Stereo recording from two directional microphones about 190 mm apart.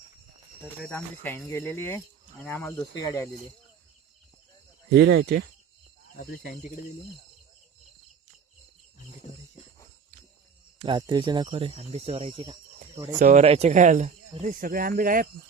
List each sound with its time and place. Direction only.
0.8 s speech: 10° left (ahead or behind)
2.7 s speech: 20° left (ahead or behind)
4.9 s speech: 65° right (ahead or behind)
6.1 s speech: 50° left (ahead or behind)
10.8 s speech: 25° right (ahead or behind)
13.1 s speech: 40° right (ahead or behind)